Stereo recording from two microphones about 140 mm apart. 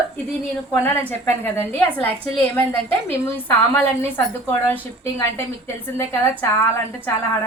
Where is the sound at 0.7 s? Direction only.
10° left (ahead or behind).